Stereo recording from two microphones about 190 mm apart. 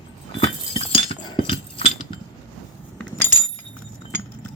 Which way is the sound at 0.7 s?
25° left (ahead or behind).